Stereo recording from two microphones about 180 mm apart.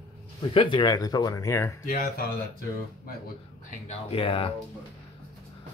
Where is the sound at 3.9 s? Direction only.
30° left (ahead or behind).